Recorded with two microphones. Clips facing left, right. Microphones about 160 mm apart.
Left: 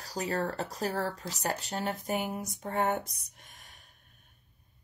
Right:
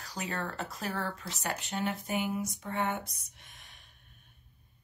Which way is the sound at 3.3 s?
45° left (ahead or behind).